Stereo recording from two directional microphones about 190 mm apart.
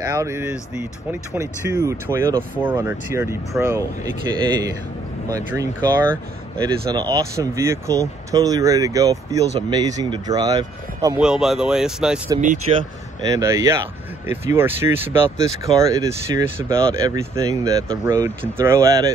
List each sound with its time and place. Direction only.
0.0 s speech: 15° right (ahead or behind)
5.3 s speech: 15° right (ahead or behind)
11.1 s speech: centre (ahead or behind)
12.7 s speech: 30° right (ahead or behind)
13.3 s speech: 15° right (ahead or behind)